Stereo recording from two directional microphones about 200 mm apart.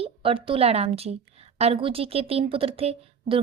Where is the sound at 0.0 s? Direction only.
25° right (ahead or behind).